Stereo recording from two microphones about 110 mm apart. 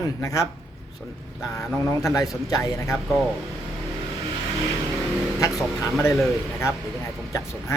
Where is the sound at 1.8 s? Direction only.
30° left (ahead or behind).